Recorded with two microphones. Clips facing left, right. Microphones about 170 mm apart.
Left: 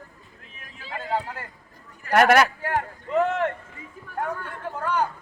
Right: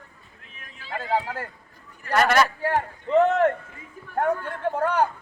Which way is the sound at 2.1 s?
60° left (ahead or behind).